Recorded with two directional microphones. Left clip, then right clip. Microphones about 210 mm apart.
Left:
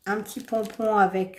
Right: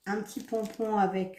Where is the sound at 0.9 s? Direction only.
45° left (ahead or behind).